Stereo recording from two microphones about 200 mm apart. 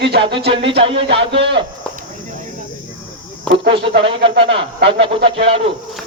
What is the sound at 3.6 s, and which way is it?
Speech, 55° right (ahead or behind).